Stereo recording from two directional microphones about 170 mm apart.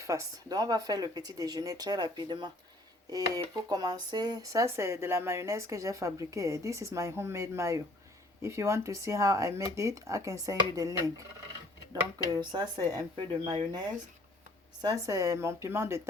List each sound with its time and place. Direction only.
0.0 s speech: 20° right (ahead or behind)
12.3 s speech: 25° right (ahead or behind)